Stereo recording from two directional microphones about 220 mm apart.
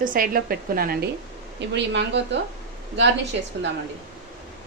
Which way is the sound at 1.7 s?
55° right (ahead or behind).